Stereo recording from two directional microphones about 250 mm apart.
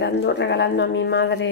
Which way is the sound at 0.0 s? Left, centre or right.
Left.